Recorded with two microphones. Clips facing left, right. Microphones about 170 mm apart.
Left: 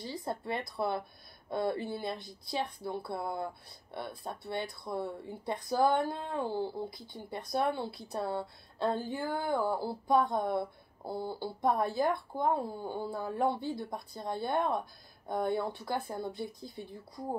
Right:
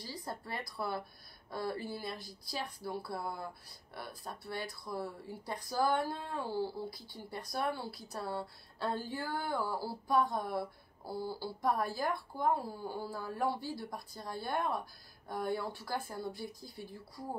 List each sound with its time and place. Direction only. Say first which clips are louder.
0.0 s speech: left 6 dB; 25° left (ahead or behind)